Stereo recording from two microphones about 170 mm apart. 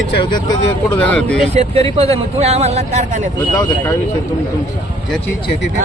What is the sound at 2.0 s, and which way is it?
Speech, 40° right (ahead or behind).